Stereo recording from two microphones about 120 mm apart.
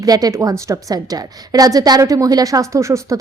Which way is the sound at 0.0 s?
30° right (ahead or behind).